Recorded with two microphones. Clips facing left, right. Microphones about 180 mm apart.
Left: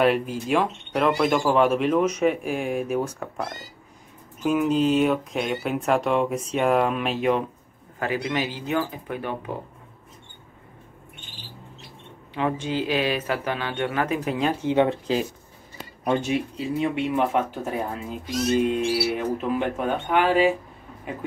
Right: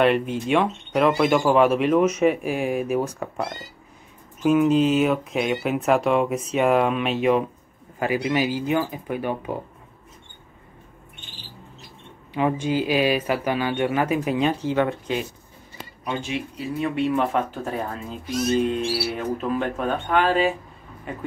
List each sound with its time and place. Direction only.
0.0 s speech: centre (ahead or behind)
12.4 s speech: 10° right (ahead or behind)
14.6 s speech: 20° left (ahead or behind)
16.0 s speech: 40° left (ahead or behind)
16.5 s speech: 15° left (ahead or behind)